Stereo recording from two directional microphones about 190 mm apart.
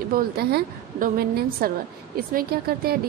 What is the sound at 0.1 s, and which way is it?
Speech, 55° right (ahead or behind).